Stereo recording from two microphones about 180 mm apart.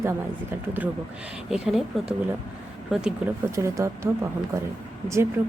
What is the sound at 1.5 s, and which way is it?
Speech, centre (ahead or behind).